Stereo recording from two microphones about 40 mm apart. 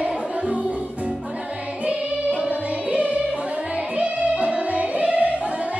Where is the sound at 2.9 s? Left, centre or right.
Right.